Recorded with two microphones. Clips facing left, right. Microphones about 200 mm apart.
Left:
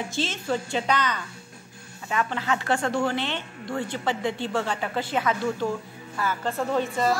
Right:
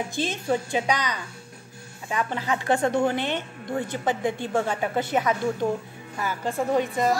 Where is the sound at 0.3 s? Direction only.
15° right (ahead or behind).